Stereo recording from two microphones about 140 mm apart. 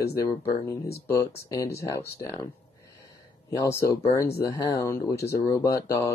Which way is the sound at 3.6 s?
25° left (ahead or behind).